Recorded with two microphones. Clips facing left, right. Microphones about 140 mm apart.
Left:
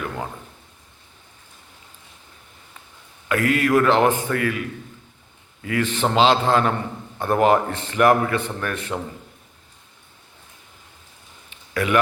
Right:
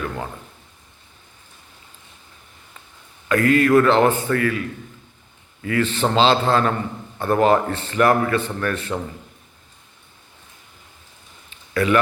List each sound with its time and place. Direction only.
3.2 s a man's voice: 10° left (ahead or behind)
5.6 s a man's voice: 15° left (ahead or behind)
11.7 s speech: 10° left (ahead or behind)